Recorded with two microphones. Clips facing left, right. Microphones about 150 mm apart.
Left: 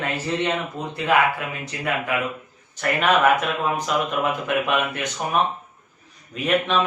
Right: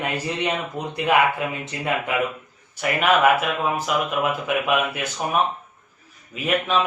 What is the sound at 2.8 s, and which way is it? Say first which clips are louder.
Speech: even; 10° right (ahead or behind).